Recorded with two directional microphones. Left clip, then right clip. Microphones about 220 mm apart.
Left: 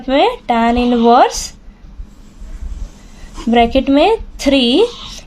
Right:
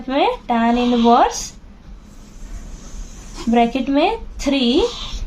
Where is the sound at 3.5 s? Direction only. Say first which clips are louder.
Left 5 dB; 45° left (ahead or behind).